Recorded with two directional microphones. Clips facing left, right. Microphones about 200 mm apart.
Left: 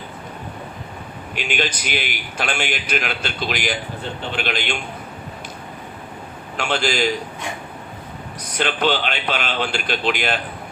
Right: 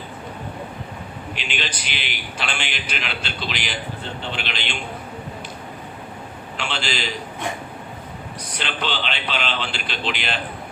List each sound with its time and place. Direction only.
1.4 s a man's voice: 45° left (ahead or behind)
6.6 s a man's voice: 45° left (ahead or behind)
8.5 s a man's voice: 45° left (ahead or behind)